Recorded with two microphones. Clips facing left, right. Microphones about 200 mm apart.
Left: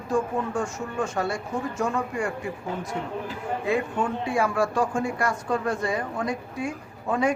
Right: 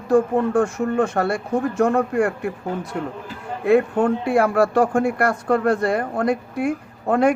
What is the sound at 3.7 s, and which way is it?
Speech, 60° right (ahead or behind).